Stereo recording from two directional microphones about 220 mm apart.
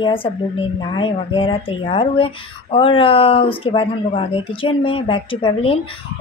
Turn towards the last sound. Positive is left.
turn(degrees=25)  # may be behind; listen again after turning